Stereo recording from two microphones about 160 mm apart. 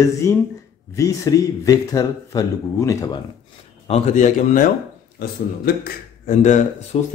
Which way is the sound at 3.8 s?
40° left (ahead or behind).